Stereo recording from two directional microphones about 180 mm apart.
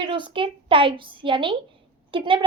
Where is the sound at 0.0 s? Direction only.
25° right (ahead or behind).